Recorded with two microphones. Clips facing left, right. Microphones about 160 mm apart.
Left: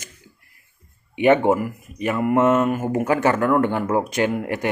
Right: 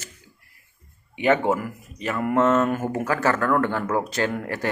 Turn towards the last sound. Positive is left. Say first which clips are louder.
# left 4 dB
turn(degrees=15)  # may be behind; listen again after turning